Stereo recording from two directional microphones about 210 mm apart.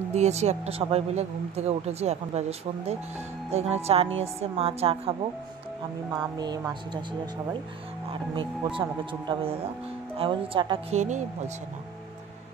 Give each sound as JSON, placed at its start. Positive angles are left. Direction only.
{"t": 0.1, "sound": "speech", "side_deg": -30}
{"t": 3.5, "sound": "a woman's voice", "side_deg": -30}
{"t": 6.3, "sound": "a woman's voice", "side_deg": -20}